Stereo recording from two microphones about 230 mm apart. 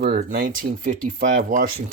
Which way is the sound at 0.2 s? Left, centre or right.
Right.